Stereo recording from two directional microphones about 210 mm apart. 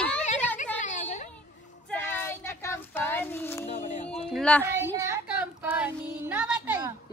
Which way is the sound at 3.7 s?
35° left (ahead or behind).